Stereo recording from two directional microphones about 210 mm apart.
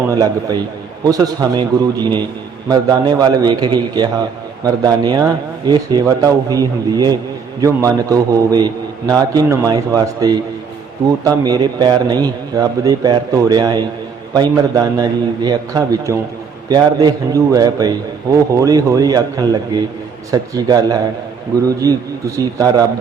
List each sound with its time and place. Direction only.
0.2 s a man's voice: 15° right (ahead or behind)